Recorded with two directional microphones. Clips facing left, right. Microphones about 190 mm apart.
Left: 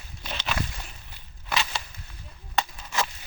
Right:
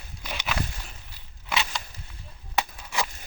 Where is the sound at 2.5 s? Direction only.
10° right (ahead or behind).